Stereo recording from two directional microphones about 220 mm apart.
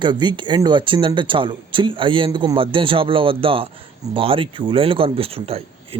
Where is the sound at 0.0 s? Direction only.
20° right (ahead or behind).